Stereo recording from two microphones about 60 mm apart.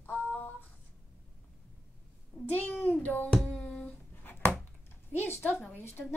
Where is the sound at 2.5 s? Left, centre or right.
Left.